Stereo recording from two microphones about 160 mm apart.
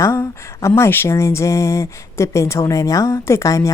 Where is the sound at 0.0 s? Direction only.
20° left (ahead or behind).